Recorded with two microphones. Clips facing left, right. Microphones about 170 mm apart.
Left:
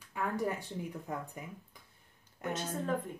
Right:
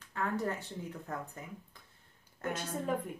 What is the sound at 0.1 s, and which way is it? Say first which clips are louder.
Speech: even; 10° left (ahead or behind).